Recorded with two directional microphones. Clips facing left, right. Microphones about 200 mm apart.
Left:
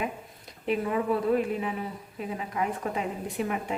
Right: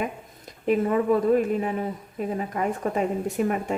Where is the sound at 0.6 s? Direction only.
45° right (ahead or behind).